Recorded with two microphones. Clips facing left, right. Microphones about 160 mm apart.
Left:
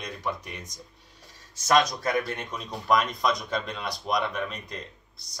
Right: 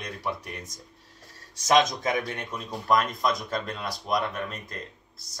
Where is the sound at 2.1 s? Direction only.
Centre (ahead or behind).